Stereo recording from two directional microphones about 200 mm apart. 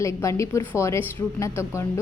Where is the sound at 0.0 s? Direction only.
15° left (ahead or behind).